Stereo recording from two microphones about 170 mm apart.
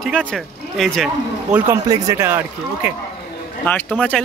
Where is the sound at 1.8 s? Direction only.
20° right (ahead or behind).